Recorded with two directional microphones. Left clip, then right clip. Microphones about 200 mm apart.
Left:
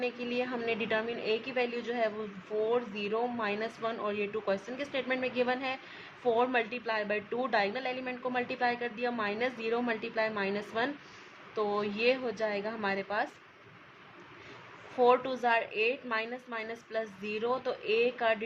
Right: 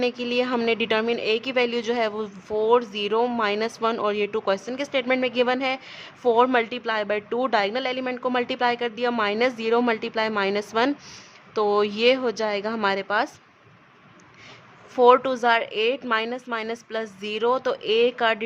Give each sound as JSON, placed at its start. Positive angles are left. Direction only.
{"t": 0.0, "sound": "speech", "side_deg": -40}
{"t": 14.9, "sound": "speech", "side_deg": -40}